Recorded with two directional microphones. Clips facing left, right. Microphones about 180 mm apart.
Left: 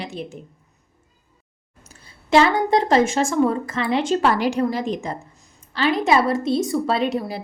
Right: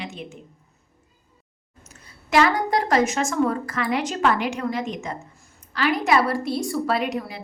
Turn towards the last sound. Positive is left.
turn(degrees=35)  # may be behind; listen again after turning